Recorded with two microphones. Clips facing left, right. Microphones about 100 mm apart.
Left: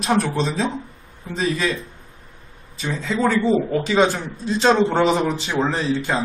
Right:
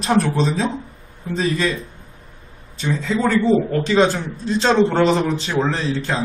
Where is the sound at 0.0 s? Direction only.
Centre (ahead or behind).